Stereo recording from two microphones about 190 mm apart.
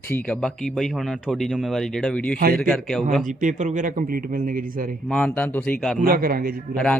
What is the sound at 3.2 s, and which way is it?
Speech, 40° right (ahead or behind).